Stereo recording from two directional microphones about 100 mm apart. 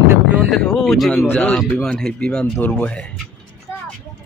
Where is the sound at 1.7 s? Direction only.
10° left (ahead or behind).